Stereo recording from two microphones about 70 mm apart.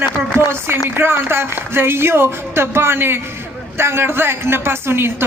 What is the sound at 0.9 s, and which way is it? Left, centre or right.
A woman's voice, right.